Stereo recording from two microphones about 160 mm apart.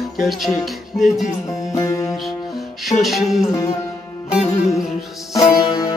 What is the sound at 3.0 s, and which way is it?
Music, centre (ahead or behind).